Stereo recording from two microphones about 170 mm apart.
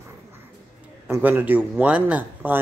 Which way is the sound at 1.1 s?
10° right (ahead or behind).